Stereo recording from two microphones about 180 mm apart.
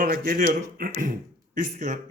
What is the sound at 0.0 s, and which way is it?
Speech, 50° right (ahead or behind).